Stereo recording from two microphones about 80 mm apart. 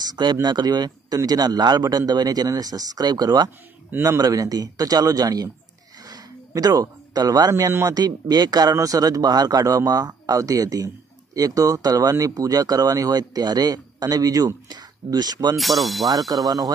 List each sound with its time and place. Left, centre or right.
0.1 s speech: right
4.2 s speech: right
6.0 s a sound: right
7.9 s speech: right
15.5 s speech: centre
16.1 s speech: right